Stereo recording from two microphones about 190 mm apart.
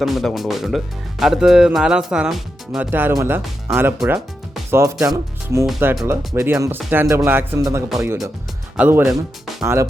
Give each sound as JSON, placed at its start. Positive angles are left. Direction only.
{"t": 0.0, "sound": "speech", "side_deg": 0}
{"t": 4.7, "sound": "speech", "side_deg": -15}